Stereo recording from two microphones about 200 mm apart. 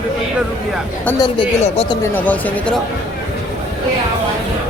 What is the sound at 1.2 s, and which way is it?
Speech, 25° left (ahead or behind).